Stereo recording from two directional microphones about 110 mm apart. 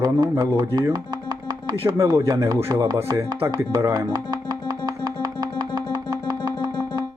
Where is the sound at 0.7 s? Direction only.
35° right (ahead or behind).